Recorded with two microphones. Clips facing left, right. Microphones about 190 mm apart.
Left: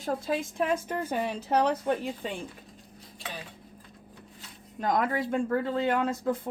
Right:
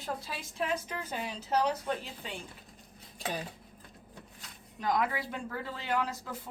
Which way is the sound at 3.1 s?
45° right (ahead or behind).